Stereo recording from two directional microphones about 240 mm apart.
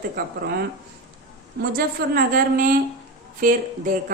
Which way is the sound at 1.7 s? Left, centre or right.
Right.